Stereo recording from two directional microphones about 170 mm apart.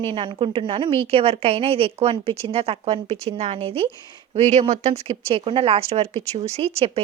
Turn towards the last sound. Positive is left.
turn(degrees=-35)  # may be behind; listen again after turning